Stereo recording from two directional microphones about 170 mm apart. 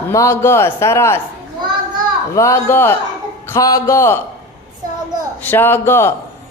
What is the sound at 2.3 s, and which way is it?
A man's voice, 15° left (ahead or behind).